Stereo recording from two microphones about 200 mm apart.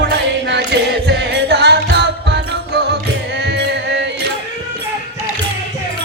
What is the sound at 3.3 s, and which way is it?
Music, 55° right (ahead or behind).